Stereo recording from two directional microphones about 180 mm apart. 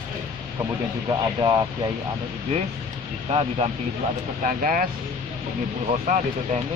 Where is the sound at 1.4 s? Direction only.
25° right (ahead or behind).